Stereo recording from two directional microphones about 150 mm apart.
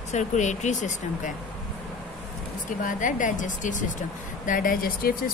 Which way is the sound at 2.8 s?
60° left (ahead or behind).